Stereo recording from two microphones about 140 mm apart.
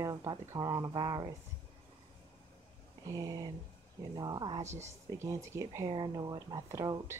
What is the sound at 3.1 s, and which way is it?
Speech, 25° right (ahead or behind).